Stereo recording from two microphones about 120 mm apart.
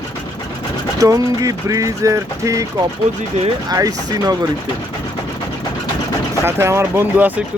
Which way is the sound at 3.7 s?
30° right (ahead or behind).